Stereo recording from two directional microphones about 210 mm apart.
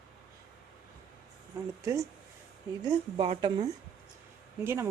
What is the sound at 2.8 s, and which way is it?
Speech, 25° right (ahead or behind).